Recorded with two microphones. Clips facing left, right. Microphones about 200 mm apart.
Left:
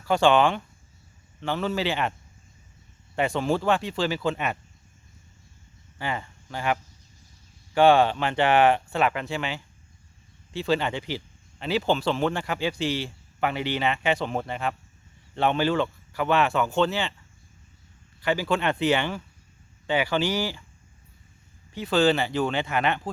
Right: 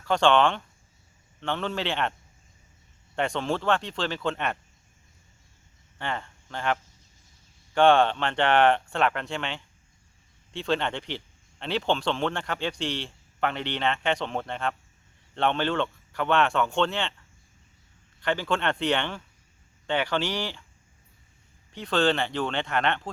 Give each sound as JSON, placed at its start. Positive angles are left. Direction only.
{"t": 0.0, "sound": "a man's voice", "side_deg": 5}
{"t": 3.2, "sound": "speech", "side_deg": 5}
{"t": 6.0, "sound": "a man's voice", "side_deg": 5}
{"t": 18.2, "sound": "a man's voice", "side_deg": 5}
{"t": 21.7, "sound": "a man's voice", "side_deg": 5}